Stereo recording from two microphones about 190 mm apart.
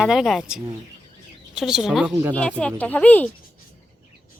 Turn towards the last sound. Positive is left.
turn(degrees=10)  # may be behind; listen again after turning